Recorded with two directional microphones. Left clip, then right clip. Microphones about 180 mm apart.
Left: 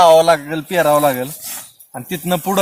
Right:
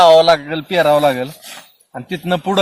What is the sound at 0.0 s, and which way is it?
Speech, 15° right (ahead or behind).